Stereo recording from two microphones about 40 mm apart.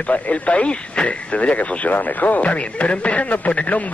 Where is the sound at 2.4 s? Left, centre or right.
Left.